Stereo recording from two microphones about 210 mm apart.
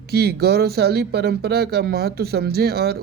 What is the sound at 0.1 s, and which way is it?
Speech, 50° right (ahead or behind).